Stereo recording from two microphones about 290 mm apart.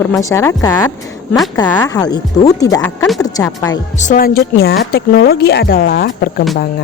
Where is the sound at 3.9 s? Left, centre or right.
Left.